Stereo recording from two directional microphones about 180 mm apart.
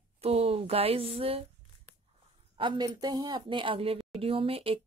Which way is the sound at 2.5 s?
25° right (ahead or behind).